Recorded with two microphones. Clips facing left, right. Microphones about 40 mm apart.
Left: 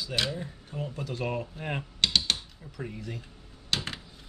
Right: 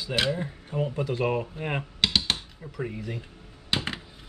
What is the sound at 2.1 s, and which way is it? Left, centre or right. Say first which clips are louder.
Typing: right 1 dB; centre.